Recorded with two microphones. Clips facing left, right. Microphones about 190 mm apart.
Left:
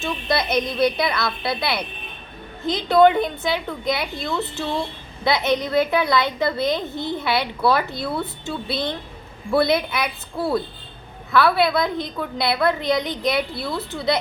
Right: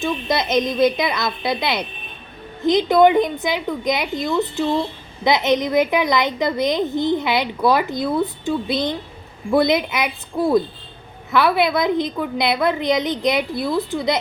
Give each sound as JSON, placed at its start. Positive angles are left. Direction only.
{"t": 0.0, "sound": "a woman's voice", "side_deg": -20}